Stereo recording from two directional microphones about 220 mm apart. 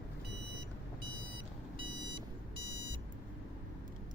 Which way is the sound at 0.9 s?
20° right (ahead or behind).